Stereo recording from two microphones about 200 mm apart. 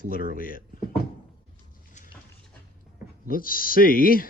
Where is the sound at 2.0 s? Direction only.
35° left (ahead or behind).